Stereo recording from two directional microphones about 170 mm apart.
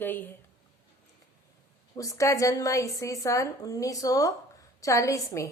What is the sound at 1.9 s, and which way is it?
A woman's voice, 20° left (ahead or behind).